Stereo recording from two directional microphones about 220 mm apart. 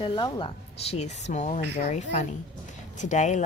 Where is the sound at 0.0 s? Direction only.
25° left (ahead or behind).